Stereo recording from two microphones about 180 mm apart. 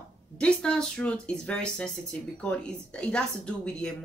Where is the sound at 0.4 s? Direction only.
5° left (ahead or behind).